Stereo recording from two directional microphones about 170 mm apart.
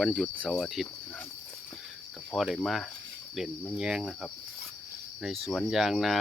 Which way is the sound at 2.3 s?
Centre (ahead or behind).